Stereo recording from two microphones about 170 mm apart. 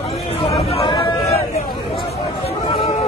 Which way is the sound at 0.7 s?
30° left (ahead or behind).